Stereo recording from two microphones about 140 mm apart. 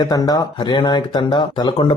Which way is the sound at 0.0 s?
25° left (ahead or behind).